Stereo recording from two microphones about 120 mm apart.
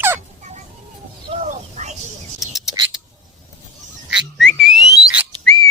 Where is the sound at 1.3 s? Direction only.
75° right (ahead or behind).